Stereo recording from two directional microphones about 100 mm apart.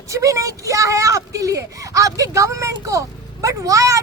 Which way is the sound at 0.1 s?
30° right (ahead or behind).